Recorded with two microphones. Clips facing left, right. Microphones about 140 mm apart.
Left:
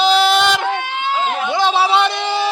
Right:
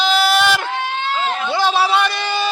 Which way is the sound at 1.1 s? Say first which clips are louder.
Left 4 dB; 15° left (ahead or behind).